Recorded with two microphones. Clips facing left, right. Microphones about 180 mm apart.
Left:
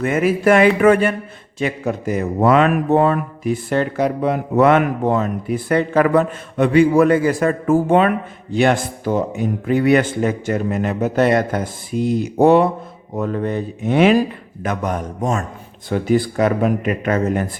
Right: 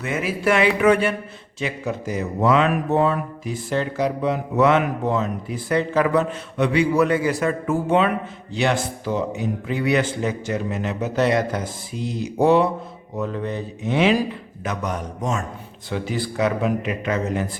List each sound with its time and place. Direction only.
0.0 s a man's voice: 50° left (ahead or behind)